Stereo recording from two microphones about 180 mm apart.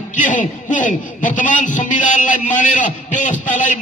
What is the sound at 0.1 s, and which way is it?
A man's voice, 45° left (ahead or behind).